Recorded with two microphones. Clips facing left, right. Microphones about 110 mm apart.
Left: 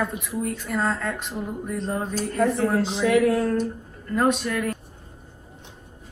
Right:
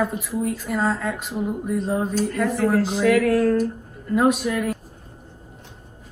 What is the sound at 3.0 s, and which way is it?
Speech, 20° left (ahead or behind).